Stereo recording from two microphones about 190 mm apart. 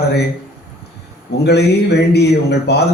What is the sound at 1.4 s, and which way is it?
A man's voice, 60° left (ahead or behind).